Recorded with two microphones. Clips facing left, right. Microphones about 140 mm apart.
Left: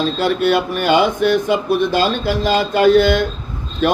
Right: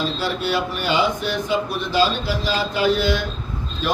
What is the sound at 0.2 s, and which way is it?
Mantra, 55° left (ahead or behind).